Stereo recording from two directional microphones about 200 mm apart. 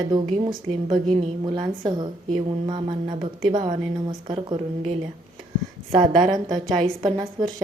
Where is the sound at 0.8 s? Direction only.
30° right (ahead or behind).